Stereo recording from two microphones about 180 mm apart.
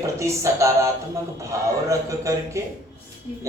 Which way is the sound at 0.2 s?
15° right (ahead or behind).